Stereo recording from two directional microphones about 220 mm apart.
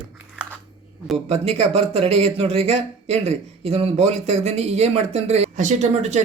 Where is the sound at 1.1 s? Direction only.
30° right (ahead or behind).